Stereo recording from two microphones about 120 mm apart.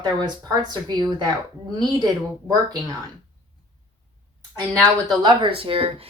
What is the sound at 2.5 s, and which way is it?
Speech, 30° right (ahead or behind).